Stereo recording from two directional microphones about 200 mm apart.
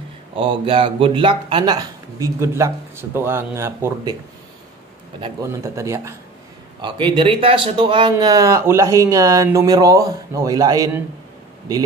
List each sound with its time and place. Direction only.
0.4 s speech: 25° right (ahead or behind)
5.2 s a man's voice: 15° right (ahead or behind)
6.8 s a man's voice: 25° right (ahead or behind)